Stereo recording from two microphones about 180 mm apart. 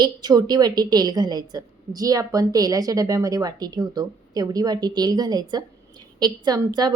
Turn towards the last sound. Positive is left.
turn(degrees=-20)  # may be behind; listen again after turning